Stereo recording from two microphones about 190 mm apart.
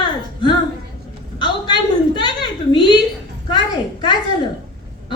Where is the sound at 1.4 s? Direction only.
25° left (ahead or behind).